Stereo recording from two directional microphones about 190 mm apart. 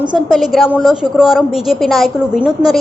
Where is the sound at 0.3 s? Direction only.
Centre (ahead or behind).